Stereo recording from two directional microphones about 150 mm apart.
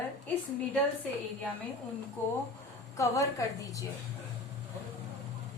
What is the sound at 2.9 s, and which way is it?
Speech, 20° left (ahead or behind).